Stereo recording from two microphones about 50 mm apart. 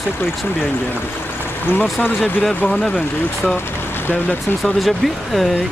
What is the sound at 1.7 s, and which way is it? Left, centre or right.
Speech, left.